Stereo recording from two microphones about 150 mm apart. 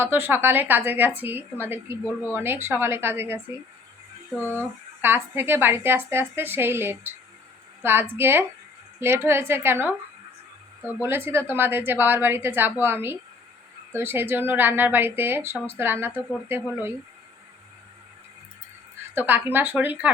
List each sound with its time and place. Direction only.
0.0 s a woman's voice: 15° right (ahead or behind)
19.1 s a woman's voice: 15° right (ahead or behind)